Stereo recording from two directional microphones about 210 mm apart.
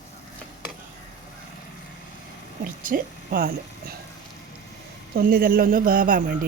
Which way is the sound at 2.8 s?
40° right (ahead or behind).